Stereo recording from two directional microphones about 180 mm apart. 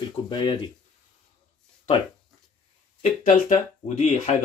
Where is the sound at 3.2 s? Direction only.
45° left (ahead or behind).